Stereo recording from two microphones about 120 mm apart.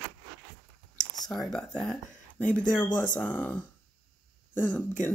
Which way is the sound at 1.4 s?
5° left (ahead or behind).